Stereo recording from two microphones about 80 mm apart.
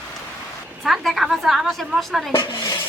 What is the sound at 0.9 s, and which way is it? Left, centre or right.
A woman's voice, centre.